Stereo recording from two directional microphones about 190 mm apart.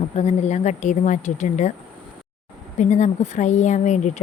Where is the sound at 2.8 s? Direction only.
40° left (ahead or behind).